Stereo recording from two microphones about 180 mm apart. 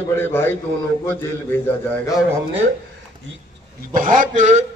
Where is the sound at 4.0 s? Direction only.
45° right (ahead or behind).